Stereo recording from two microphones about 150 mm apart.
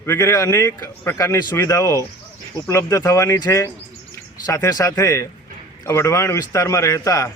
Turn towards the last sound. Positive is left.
turn(degrees=20)  # may be behind; listen again after turning